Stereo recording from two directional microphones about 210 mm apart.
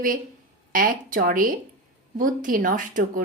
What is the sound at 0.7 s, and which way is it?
Speech, 40° right (ahead or behind).